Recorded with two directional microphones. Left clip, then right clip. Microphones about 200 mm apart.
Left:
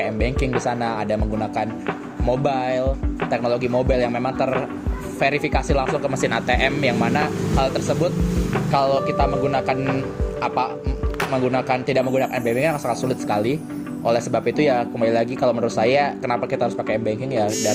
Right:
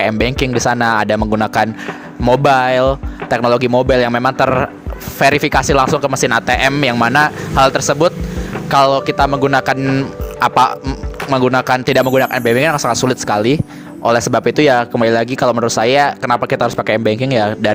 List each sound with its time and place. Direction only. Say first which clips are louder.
0.0 s speech: right 8 dB; 45° right (ahead or behind)